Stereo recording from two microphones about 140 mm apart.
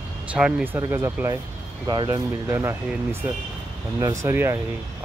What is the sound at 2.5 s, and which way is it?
Speech, 15° right (ahead or behind).